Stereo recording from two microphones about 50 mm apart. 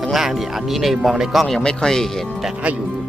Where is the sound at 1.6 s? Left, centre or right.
Centre.